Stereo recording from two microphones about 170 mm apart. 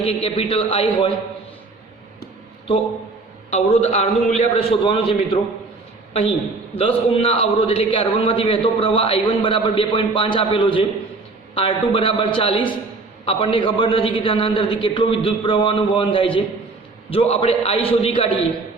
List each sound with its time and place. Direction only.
0.0 s a man's voice: 35° left (ahead or behind)
3.5 s a man's voice: 40° left (ahead or behind)
6.7 s a man's voice: 35° left (ahead or behind)